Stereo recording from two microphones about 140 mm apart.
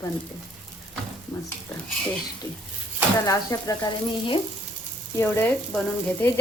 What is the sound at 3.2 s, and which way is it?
Speech, 25° left (ahead or behind).